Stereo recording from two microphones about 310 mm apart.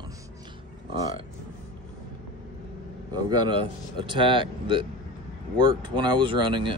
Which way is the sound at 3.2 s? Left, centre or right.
Centre.